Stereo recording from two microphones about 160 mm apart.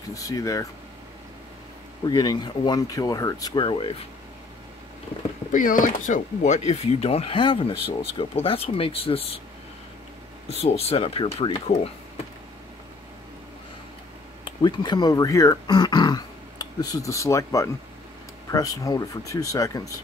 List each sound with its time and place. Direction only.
0.1 s speech: 20° left (ahead or behind)
2.0 s speech: 25° left (ahead or behind)
5.5 s speech: 55° left (ahead or behind); by 9.4 s 35° left (ahead or behind)
10.5 s speech: 40° left (ahead or behind)
14.4 s speech: 30° left (ahead or behind)